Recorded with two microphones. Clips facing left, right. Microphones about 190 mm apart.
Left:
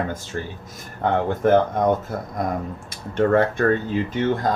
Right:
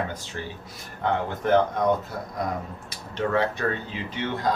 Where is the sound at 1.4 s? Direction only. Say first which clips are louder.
Left 3 dB; 50° left (ahead or behind).